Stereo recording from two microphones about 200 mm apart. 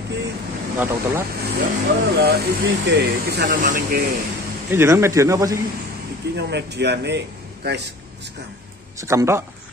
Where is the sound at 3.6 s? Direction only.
40° right (ahead or behind).